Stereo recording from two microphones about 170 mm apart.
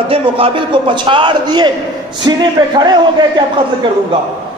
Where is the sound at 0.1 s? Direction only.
30° right (ahead or behind).